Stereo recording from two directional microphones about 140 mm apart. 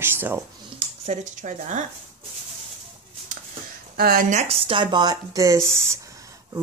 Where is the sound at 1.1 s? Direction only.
60° right (ahead or behind).